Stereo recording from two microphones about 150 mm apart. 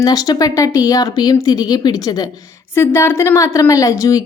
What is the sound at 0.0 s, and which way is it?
A woman's voice, 25° left (ahead or behind).